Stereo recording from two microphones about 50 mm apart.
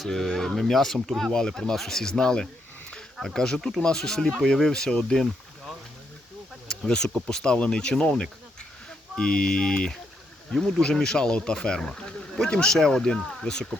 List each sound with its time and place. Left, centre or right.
0.0 s speech: centre